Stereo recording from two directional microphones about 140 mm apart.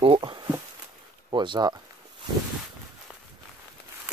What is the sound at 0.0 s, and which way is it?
Speech, 40° right (ahead or behind).